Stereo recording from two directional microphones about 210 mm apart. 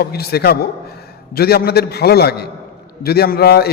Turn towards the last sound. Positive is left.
turn(degrees=50)  # may be behind; listen again after turning